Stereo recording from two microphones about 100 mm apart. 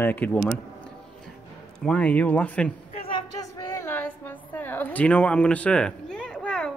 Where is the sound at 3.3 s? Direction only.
40° left (ahead or behind).